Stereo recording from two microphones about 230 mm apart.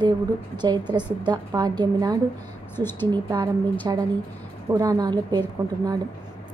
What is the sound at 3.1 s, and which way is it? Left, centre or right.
A woman's voice, centre.